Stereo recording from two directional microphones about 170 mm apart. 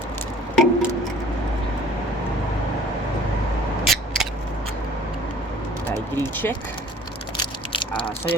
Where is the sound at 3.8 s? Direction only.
Centre (ahead or behind).